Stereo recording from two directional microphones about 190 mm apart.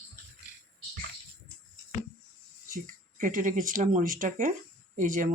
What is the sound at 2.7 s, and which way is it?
Speech, 45° right (ahead or behind).